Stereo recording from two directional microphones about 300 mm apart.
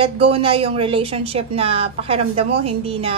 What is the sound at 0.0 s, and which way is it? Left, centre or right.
A woman's voice, centre.